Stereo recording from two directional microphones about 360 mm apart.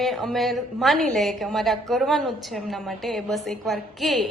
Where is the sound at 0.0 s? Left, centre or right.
Centre.